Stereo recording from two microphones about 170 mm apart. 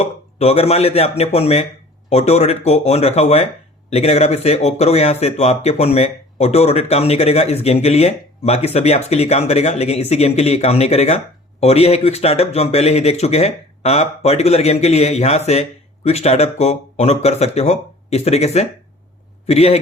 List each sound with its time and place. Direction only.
0.0 s speech: 40° left (ahead or behind)